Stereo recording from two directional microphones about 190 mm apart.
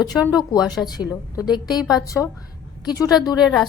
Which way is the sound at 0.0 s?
20° left (ahead or behind).